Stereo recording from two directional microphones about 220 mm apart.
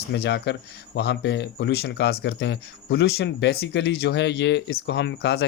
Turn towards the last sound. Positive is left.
turn(degrees=50)  # may be behind; listen again after turning